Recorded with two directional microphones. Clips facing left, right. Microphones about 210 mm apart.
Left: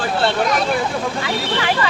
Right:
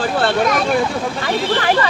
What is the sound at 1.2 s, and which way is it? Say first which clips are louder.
Speech: right 3 dB; 45° right (ahead or behind).